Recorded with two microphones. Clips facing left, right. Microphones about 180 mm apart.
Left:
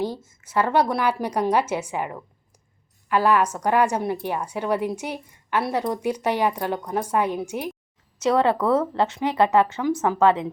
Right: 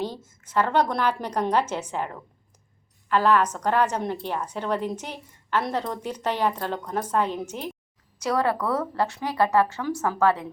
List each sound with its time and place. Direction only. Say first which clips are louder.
0.0 s a woman's voice: left 4 dB; 10° left (ahead or behind)
8.2 s speech: left 4 dB; 25° left (ahead or behind)